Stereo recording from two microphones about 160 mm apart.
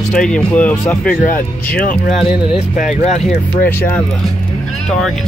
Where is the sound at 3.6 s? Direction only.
10° left (ahead or behind).